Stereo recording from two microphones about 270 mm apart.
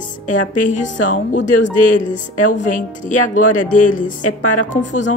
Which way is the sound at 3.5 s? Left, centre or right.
Left.